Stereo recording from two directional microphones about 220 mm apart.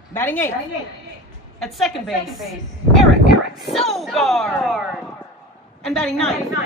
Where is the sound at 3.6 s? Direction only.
Centre (ahead or behind).